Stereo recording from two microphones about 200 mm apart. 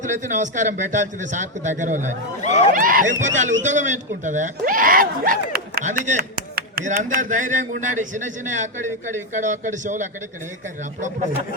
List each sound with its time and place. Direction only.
0.0 s speech: 35° right (ahead or behind)